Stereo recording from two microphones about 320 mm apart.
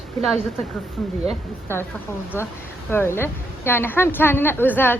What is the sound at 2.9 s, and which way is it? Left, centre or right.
A woman's voice, centre.